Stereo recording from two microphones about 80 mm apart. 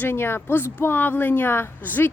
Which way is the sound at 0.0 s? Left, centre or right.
Left.